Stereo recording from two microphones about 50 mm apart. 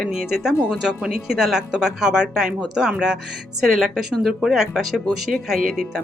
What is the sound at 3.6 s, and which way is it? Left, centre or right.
A woman's voice, centre.